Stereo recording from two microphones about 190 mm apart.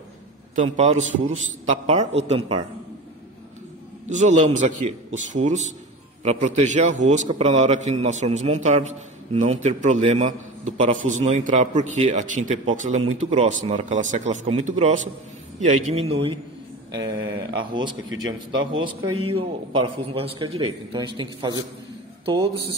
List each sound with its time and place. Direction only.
0.6 s a man's voice: 35° right (ahead or behind)
4.1 s a man's voice: 40° right (ahead or behind)
16.9 s a sound: 85° right
17.7 s a man's voice: 25° right (ahead or behind)
18.5 s a man's voice: 90° right
18.8 s a man's voice: 30° right (ahead or behind)